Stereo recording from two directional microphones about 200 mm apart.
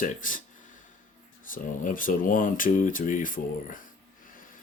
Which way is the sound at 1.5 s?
45° left (ahead or behind).